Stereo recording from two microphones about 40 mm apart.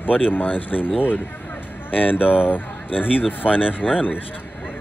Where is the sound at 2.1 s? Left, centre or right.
Left.